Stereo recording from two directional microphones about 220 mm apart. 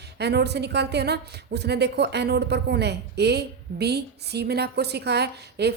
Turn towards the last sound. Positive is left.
turn(degrees=-50)  # may be behind; listen again after turning